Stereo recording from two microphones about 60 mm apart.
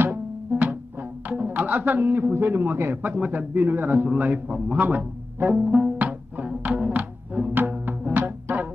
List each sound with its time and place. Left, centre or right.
0.0 s music: right
1.3 s a man's voice: right
5.9 s music: right
7.8 s music: right